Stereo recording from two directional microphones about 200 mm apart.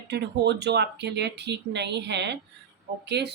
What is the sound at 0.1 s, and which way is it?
Speech, 55° right (ahead or behind).